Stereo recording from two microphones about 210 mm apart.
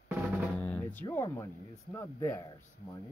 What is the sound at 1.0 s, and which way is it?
Speech, 10° left (ahead or behind).